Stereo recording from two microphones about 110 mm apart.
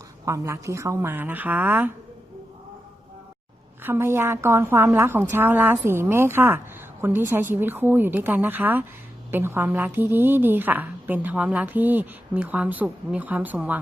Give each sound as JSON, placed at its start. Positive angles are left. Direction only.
{"t": 0.3, "sound": "a woman's voice", "side_deg": -25}
{"t": 3.8, "sound": "a woman's voice", "side_deg": -20}